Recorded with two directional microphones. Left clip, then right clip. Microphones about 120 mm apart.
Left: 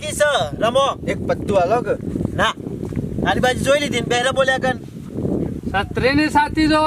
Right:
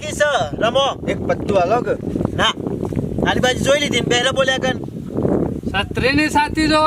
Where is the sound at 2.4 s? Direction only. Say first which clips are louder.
Right 1 dB; 5° left (ahead or behind).